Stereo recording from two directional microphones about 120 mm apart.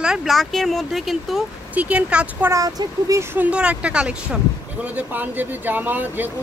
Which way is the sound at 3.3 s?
10° right (ahead or behind).